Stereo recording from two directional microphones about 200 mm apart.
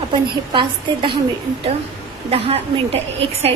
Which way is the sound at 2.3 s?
30° right (ahead or behind).